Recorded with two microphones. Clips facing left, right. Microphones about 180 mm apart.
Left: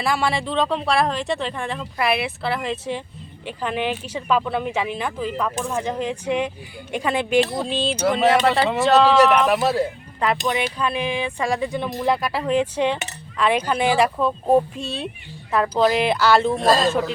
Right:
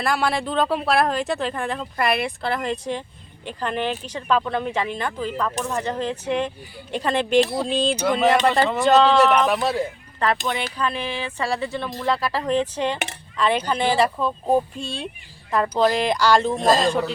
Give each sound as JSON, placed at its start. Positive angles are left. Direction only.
{"t": 0.0, "sound": "speech", "side_deg": 0}
{"t": 16.6, "sound": "a man's voice", "side_deg": -20}